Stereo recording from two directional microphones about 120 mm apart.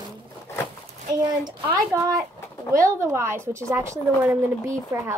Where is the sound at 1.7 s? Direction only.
25° right (ahead or behind).